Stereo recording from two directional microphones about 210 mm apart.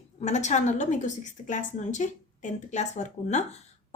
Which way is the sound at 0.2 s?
35° left (ahead or behind).